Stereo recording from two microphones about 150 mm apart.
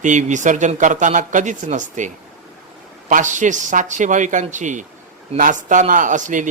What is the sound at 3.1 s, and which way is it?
Speech, 55° right (ahead or behind).